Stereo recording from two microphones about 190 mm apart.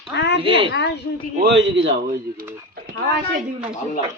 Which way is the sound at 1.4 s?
65° right (ahead or behind).